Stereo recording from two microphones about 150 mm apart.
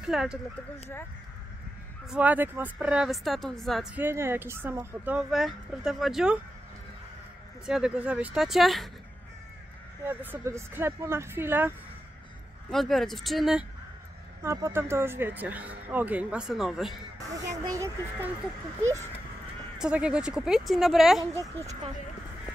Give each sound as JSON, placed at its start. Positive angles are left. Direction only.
{"t": 0.0, "sound": "speech", "side_deg": -5}
{"t": 2.0, "sound": "speech", "side_deg": -10}
{"t": 3.9, "sound": "speech", "side_deg": -15}
{"t": 5.3, "sound": "speech", "side_deg": 0}
{"t": 7.6, "sound": "speech", "side_deg": -5}
{"t": 10.0, "sound": "speech", "side_deg": -15}
{"t": 12.7, "sound": "speech", "side_deg": 0}
{"t": 14.4, "sound": "speech", "side_deg": -20}
{"t": 17.7, "sound": "speech", "side_deg": -20}
{"t": 19.8, "sound": "speech", "side_deg": -5}